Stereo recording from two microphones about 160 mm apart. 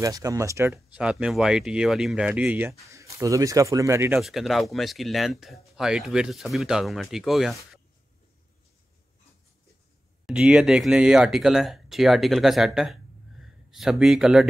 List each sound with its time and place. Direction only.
0.0 s speech: 20° right (ahead or behind)
4.2 s speech: centre (ahead or behind)
10.2 s speech: 5° right (ahead or behind)